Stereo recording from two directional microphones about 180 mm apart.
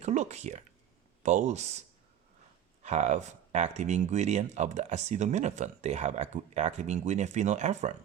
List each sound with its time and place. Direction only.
0.0 s speech: 40° right (ahead or behind)
2.8 s speech: 40° right (ahead or behind)